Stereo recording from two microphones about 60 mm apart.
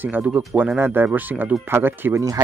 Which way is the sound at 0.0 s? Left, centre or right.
Right.